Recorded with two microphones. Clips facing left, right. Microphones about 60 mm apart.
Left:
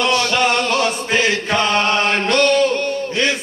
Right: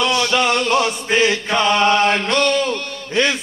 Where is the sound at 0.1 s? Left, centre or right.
Centre.